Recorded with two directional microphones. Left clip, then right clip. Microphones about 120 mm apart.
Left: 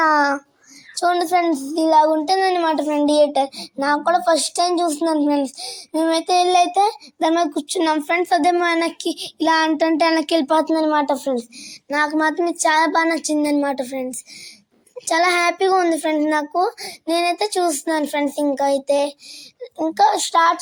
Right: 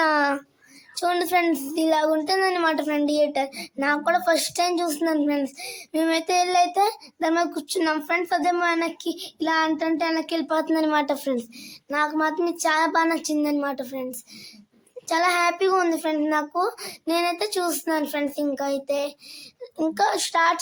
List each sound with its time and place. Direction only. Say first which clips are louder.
0.1 s a sound: left 5 dB; 10° right (ahead or behind)
1.1 s speech: left 2 dB; 15° left (ahead or behind)
2.2 s a child's voice: left 4 dB; 30° left (ahead or behind); by 3.1 s 15° left (ahead or behind)
3.1 s a child's voice: left 9 dB; 25° left (ahead or behind)
8.6 s child singing: left 4 dB; 40° left (ahead or behind)
10.7 s a child's voice: left 4 dB; 20° left (ahead or behind)
11.9 s a child's voice: left 4 dB; 40° left (ahead or behind)
19.9 s a child's voice: left 7 dB; 20° left (ahead or behind)